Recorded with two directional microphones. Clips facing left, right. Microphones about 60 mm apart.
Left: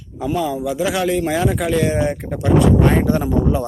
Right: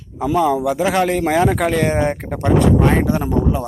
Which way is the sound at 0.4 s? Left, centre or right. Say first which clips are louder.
Right 5 dB; right.